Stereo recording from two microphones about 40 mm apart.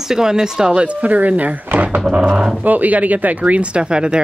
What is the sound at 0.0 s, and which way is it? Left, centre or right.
Speech, centre.